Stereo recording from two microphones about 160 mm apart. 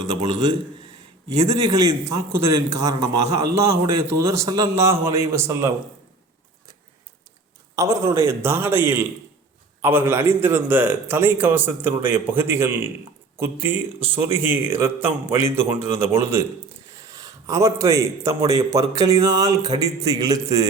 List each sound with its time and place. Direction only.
0.0 s speech: 25° right (ahead or behind)
2.0 s speech: 20° right (ahead or behind)
7.8 s speech: 20° right (ahead or behind)
17.0 s a sound: 20° right (ahead or behind)
18.3 s speech: 20° right (ahead or behind)